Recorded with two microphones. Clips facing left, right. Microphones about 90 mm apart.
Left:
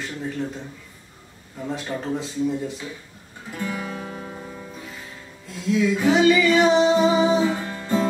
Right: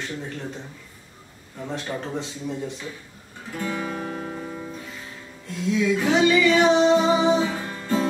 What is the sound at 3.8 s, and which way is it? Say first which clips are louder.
Music: right 2 dB; 35° right (ahead or behind).